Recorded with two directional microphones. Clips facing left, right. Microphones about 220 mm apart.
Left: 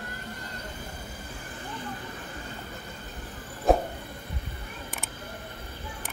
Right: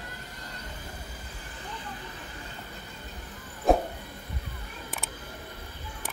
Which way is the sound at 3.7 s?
Centre (ahead or behind).